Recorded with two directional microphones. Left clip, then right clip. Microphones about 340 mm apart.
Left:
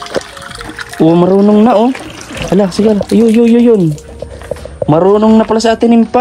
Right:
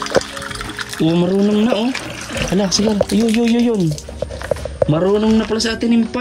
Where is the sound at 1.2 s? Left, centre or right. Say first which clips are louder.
Left 8 dB; left.